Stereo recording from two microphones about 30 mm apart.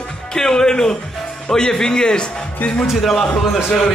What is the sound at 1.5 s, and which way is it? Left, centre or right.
Speech, left.